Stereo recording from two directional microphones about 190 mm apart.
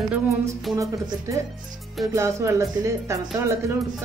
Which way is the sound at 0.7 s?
15° right (ahead or behind).